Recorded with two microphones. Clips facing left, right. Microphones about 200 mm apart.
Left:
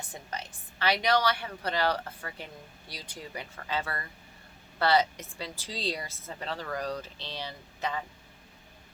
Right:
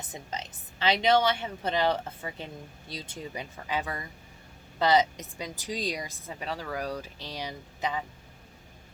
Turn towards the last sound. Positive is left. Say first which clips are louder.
# right 2 dB
turn(degrees=-15)  # may be behind; listen again after turning